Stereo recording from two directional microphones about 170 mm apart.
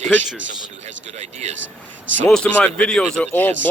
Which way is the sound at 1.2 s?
40° right (ahead or behind).